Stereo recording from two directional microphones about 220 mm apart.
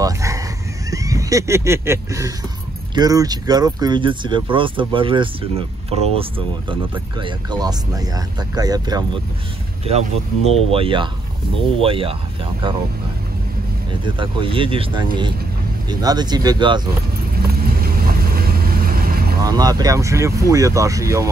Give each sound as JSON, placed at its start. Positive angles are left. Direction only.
{"t": 0.0, "sound": "dog", "side_deg": -15}
{"t": 2.9, "sound": "speech", "side_deg": -15}
{"t": 9.8, "sound": "speech", "side_deg": -30}
{"t": 14.0, "sound": "speech", "side_deg": -25}
{"t": 17.6, "sound": "vehicle", "side_deg": -45}
{"t": 19.4, "sound": "speech", "side_deg": -15}